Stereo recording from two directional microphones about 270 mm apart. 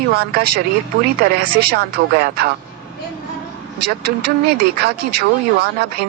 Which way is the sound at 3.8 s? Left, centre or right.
Right.